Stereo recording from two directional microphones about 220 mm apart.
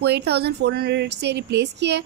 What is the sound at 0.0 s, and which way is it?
Speech, 50° right (ahead or behind).